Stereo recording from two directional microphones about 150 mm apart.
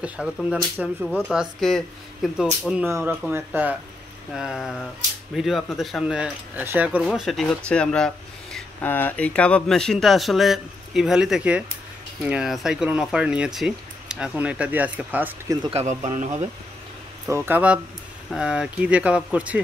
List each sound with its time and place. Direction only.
0.0 s speech: 5° right (ahead or behind)
7.1 s speech: centre (ahead or behind)
15.7 s speech: 50° right (ahead or behind)
17.3 s speech: 15° right (ahead or behind)